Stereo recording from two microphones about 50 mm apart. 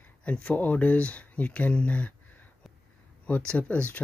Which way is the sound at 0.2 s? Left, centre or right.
Left.